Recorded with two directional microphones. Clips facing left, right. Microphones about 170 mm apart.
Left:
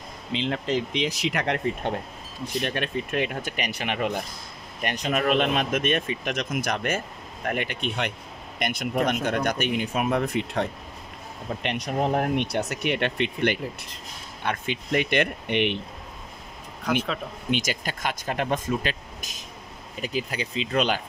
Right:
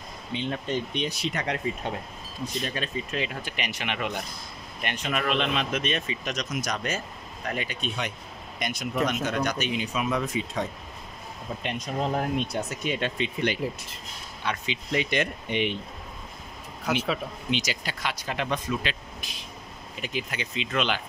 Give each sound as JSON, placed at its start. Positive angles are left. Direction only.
{"t": 0.3, "sound": "speech", "side_deg": 90}
{"t": 16.9, "sound": "speech", "side_deg": -5}
{"t": 17.5, "sound": "speech", "side_deg": 50}